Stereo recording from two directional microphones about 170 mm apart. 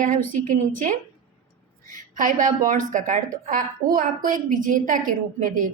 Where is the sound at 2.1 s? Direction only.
50° right (ahead or behind).